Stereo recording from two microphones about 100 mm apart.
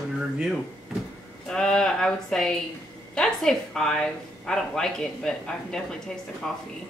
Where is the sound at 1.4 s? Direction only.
5° left (ahead or behind).